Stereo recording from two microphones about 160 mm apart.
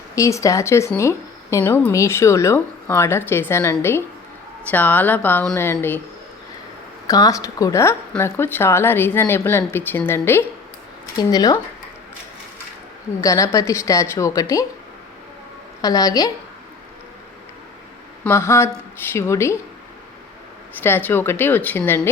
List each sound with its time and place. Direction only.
0.2 s speech: 20° left (ahead or behind)
7.1 s a woman's voice: 20° left (ahead or behind)
13.2 s a woman's voice: 20° left (ahead or behind)
15.8 s a woman's voice: 25° left (ahead or behind)
18.2 s speech: 15° left (ahead or behind)
20.8 s speech: 15° left (ahead or behind)